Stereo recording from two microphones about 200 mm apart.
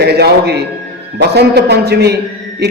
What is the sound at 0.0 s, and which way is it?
Music, 55° right (ahead or behind).